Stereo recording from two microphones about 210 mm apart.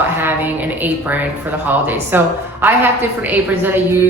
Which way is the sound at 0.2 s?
10° right (ahead or behind).